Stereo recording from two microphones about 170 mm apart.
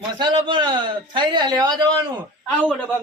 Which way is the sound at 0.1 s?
25° right (ahead or behind).